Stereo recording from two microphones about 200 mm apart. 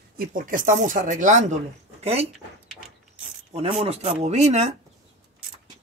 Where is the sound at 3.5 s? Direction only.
30° right (ahead or behind).